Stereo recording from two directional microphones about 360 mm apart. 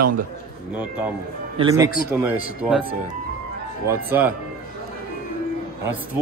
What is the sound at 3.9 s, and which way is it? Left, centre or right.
Speech, centre.